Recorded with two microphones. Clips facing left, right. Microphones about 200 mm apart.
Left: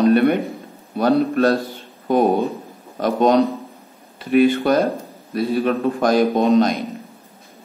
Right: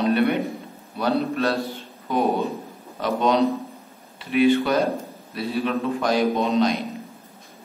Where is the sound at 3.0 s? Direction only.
45° left (ahead or behind).